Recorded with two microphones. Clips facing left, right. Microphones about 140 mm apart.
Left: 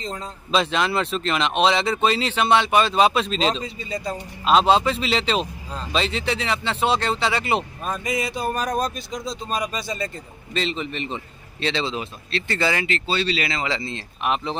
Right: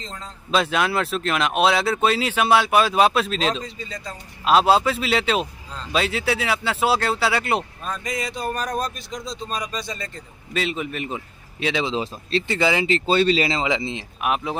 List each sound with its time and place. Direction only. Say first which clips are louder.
0.0 s a man's voice: left 5 dB; 15° left (ahead or behind)
0.5 s speech: even; 5° right (ahead or behind)
3.9 s a man's voice: left 7 dB; 10° left (ahead or behind)
4.5 s speech: even; 5° right (ahead or behind)
10.5 s a man's voice: right 1 dB; 5° right (ahead or behind)
13.0 s speech: right 6 dB; 45° right (ahead or behind)
13.6 s a man's voice: right 3 dB; 20° right (ahead or behind)